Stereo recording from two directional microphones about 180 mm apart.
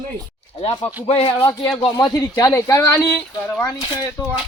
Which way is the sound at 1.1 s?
35° left (ahead or behind).